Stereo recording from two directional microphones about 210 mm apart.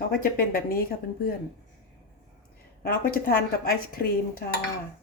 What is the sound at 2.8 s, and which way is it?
Speech, 45° left (ahead or behind).